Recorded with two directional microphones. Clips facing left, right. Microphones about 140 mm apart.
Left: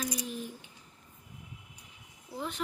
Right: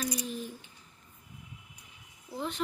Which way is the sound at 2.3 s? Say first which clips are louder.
Right 2 dB; 5° left (ahead or behind).